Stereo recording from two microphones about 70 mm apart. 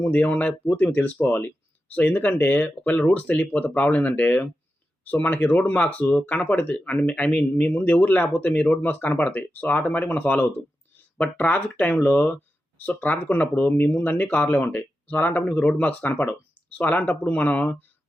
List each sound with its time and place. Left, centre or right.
0.0 s speech: left
0.9 s speech: left